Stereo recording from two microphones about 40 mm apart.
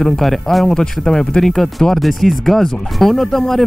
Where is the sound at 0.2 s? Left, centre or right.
Centre.